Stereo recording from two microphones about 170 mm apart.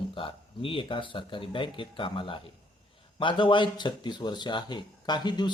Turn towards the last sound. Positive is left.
turn(degrees=25)  # may be behind; listen again after turning